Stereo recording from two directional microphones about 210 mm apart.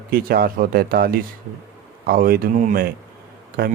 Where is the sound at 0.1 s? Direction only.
45° right (ahead or behind).